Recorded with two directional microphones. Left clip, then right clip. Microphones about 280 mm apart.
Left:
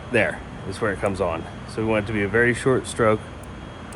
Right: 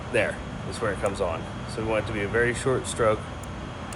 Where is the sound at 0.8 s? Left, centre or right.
Left.